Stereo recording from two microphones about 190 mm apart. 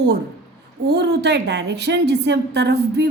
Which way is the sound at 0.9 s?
60° right (ahead or behind).